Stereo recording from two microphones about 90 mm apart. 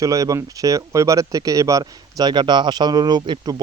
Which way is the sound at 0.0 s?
40° right (ahead or behind).